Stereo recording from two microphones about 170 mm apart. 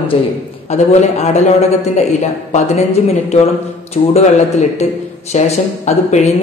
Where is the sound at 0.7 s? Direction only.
40° left (ahead or behind).